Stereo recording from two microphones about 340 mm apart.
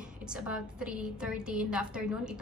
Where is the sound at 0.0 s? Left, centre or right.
Centre.